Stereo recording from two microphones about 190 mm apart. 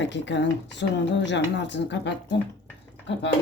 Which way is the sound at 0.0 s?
70° left (ahead or behind).